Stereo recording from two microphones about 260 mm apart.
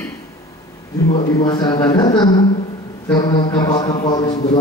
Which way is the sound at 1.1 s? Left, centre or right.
Centre.